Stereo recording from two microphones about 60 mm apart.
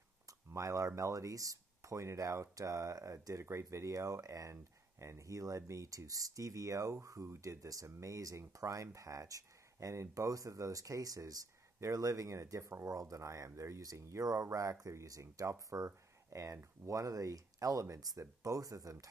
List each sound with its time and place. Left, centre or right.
0.5 s speech: right
3.4 s speech: right
15.5 s speech: right